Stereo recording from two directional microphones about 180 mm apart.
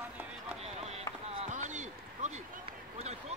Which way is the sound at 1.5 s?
40° right (ahead or behind).